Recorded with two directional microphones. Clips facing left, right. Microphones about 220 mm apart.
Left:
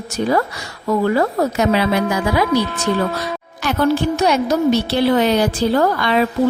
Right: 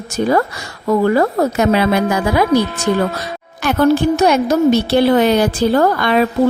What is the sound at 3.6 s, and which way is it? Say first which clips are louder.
A woman's voice: right 4 dB; 50° right (ahead or behind).